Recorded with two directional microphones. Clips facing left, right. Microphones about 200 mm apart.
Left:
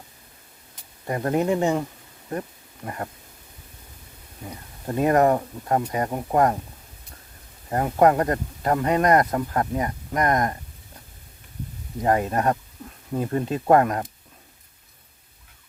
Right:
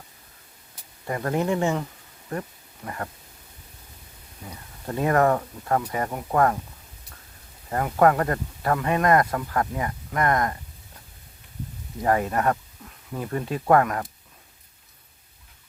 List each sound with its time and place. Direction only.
1.0 s speech: 25° left (ahead or behind)
2.8 s speech: 25° left (ahead or behind)
4.9 s speech: 20° left (ahead or behind)
7.7 s speech: 25° left (ahead or behind)
12.0 s speech: 25° left (ahead or behind)